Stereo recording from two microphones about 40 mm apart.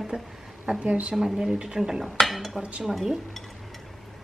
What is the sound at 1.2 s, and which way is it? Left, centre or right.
Speech, centre.